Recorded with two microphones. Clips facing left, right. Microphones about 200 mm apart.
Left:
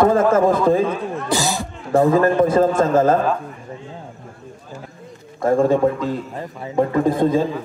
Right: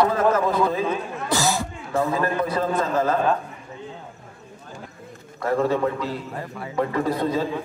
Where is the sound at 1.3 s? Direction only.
15° left (ahead or behind).